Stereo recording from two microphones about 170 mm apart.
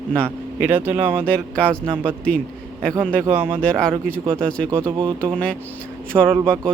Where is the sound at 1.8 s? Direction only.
30° right (ahead or behind).